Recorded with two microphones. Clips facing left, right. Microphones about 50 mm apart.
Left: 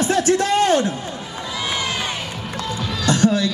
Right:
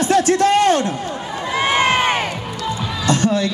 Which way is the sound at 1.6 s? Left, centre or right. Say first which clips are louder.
Right 9 dB; right.